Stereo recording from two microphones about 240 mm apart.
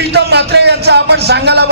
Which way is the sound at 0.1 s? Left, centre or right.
Right.